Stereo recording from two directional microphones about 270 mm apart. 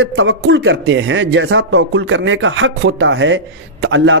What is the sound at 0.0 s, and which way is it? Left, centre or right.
Speech, right.